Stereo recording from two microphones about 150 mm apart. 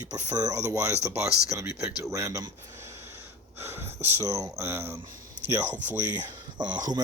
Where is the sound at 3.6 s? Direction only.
15° right (ahead or behind).